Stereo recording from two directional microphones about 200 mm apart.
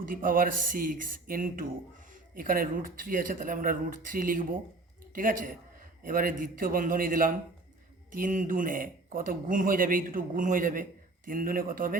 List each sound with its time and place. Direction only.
0.0 s speech: 45° right (ahead or behind)